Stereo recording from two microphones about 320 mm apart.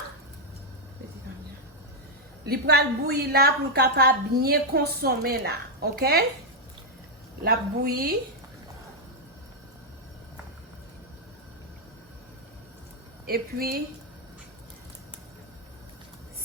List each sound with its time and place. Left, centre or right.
2.5 s a woman's voice: right
7.4 s a woman's voice: right
13.2 s a woman's voice: right